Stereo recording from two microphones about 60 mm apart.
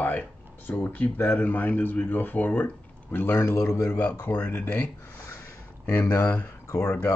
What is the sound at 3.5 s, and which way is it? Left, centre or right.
Speech, left.